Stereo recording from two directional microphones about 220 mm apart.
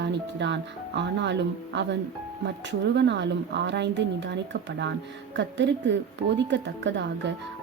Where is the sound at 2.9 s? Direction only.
50° right (ahead or behind).